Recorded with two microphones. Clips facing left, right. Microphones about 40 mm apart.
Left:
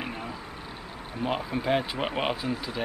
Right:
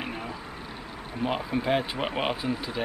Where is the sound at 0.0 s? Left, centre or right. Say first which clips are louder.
Right 1 dB; centre.